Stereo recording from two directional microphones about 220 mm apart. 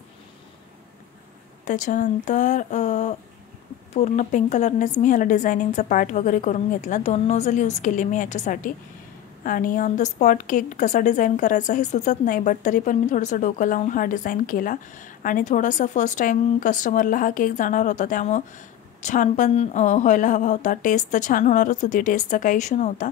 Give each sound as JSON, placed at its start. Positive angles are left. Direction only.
{"t": 1.6, "sound": "a woman's voice", "side_deg": 35}